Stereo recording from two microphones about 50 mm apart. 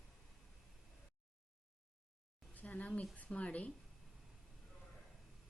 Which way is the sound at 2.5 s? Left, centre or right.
Left.